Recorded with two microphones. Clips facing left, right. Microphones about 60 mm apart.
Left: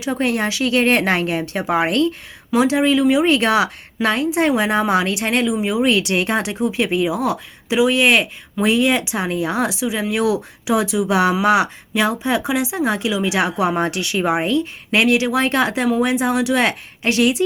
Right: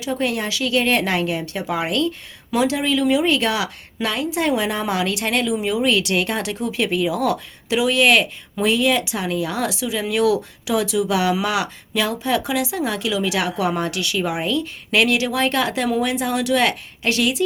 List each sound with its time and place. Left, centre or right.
0.0 s a woman's voice: left